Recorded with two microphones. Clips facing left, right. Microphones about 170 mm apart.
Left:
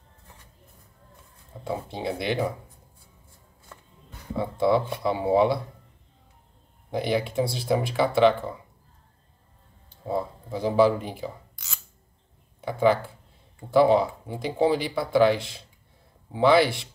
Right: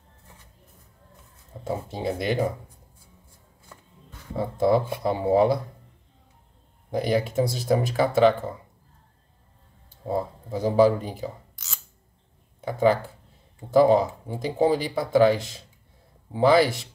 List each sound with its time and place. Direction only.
1.6 s speech: 45° right (ahead or behind)
4.4 s speech: 45° right (ahead or behind)
6.9 s speech: 45° right (ahead or behind)
10.0 s speech: 45° right (ahead or behind)
12.5 s speech: 40° right (ahead or behind)